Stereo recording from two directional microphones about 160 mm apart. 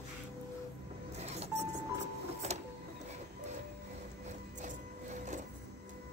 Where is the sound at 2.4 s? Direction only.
45° right (ahead or behind).